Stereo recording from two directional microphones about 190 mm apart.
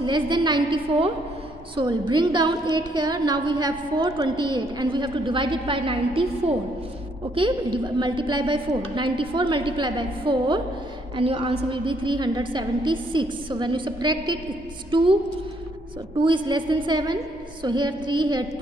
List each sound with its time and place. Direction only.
0.0 s a woman's voice: 25° right (ahead or behind)
7.3 s a woman's voice: 25° right (ahead or behind)
16.2 s a woman's voice: 25° right (ahead or behind)